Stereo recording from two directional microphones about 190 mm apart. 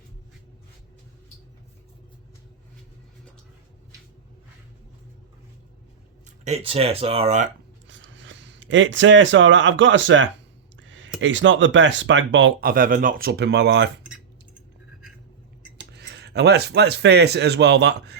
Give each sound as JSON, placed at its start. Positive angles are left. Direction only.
{"t": 6.4, "sound": "speech", "side_deg": -30}
{"t": 7.9, "sound": "speech", "side_deg": -75}
{"t": 10.8, "sound": "a sound", "side_deg": -75}
{"t": 11.2, "sound": "speech", "side_deg": -75}
{"t": 12.6, "sound": "speech", "side_deg": -45}
{"t": 15.8, "sound": "speech", "side_deg": -60}